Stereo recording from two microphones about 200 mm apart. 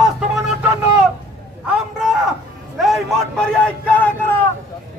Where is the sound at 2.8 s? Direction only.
Centre (ahead or behind).